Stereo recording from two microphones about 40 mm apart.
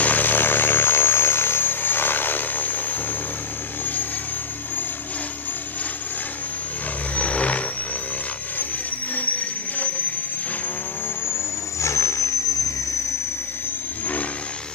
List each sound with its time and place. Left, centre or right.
0.0 s aircraft: left
7.2 s vehicle: left
9.1 s vehicle: left